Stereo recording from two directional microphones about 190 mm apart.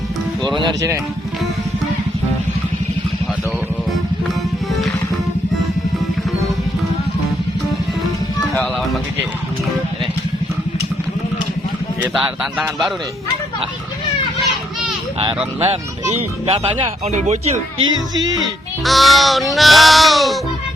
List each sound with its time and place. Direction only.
0.5 s speech: 25° right (ahead or behind)
12.0 s speech: 5° right (ahead or behind)
14.4 s children playing: centre (ahead or behind)
15.6 s speech: 30° right (ahead or behind)
18.9 s speech: centre (ahead or behind)